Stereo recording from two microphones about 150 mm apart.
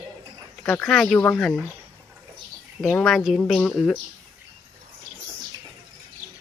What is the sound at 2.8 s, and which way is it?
Speech, centre (ahead or behind).